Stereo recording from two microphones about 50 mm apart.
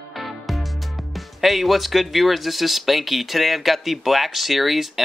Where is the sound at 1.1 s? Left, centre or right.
Centre.